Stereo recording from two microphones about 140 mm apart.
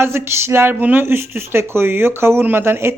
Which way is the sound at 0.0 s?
20° right (ahead or behind).